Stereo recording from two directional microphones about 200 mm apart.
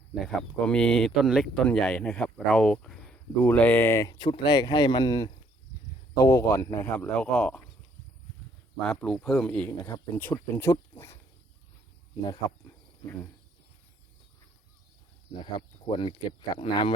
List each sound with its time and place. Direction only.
0.1 s speech: centre (ahead or behind)
8.8 s speech: 5° left (ahead or behind)
15.5 s speech: 25° left (ahead or behind)